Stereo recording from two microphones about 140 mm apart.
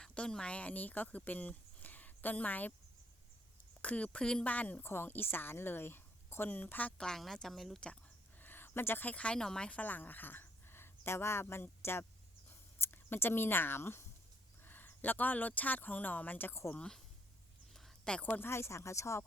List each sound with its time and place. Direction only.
0.0 s speech: 5° left (ahead or behind)
3.8 s a woman's voice: 10° left (ahead or behind)
8.4 s speech: 15° left (ahead or behind)
12.5 s a sound: 15° left (ahead or behind)
14.6 s speech: 15° left (ahead or behind)
17.7 s speech: 5° left (ahead or behind); by 19.2 s 20° left (ahead or behind)